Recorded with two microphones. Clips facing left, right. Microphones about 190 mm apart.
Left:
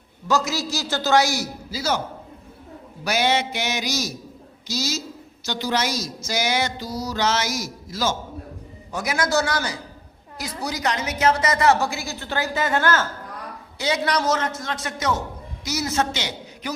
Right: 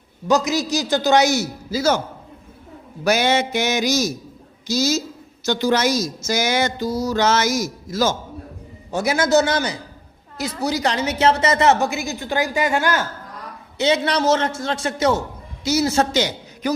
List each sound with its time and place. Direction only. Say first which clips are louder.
0.3 s a man's voice: right 5 dB; 15° right (ahead or behind)
1.7 s speech: right 6 dB; 50° right (ahead or behind)
3.0 s speech: right 4 dB; 50° right (ahead or behind)
8.9 s a woman's voice: right 6 dB; 25° right (ahead or behind)
13.7 s a woman's voice: right 4 dB; 25° right (ahead or behind); by 16.7 s 40° right (ahead or behind)